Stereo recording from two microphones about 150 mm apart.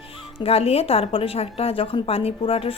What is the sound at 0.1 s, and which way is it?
A woman's voice, 40° left (ahead or behind).